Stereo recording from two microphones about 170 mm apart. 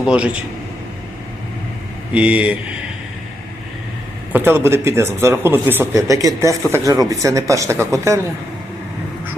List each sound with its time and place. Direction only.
0.0 s a man's voice: 5° right (ahead or behind)
2.1 s speech: 5° right (ahead or behind)
4.3 s speech: 10° right (ahead or behind)